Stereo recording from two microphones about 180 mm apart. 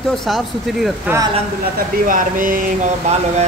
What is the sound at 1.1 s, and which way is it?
Speech, 10° right (ahead or behind).